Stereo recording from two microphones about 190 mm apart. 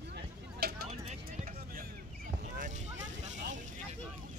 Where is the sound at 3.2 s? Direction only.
40° right (ahead or behind).